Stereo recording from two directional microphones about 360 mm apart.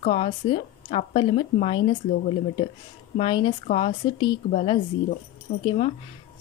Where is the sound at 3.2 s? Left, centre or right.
Centre.